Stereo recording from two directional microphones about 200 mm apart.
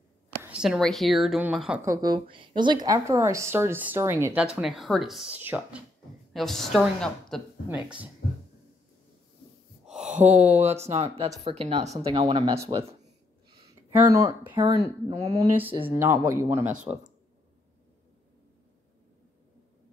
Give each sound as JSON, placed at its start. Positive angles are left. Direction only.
{"t": 0.4, "sound": "a woman's voice", "side_deg": -5}
{"t": 1.9, "sound": "a woman's voice", "side_deg": -20}
{"t": 6.3, "sound": "a woman's voice", "side_deg": 0}
{"t": 9.8, "sound": "a sound", "side_deg": -5}
{"t": 10.5, "sound": "a woman's voice", "side_deg": -35}